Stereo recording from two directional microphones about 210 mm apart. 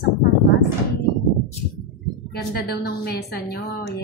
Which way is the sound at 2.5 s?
45° left (ahead or behind).